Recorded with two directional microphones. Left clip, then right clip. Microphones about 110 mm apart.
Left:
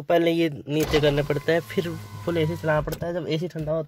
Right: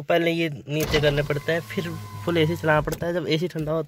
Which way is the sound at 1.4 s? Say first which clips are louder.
Left 2 dB; 45° left (ahead or behind).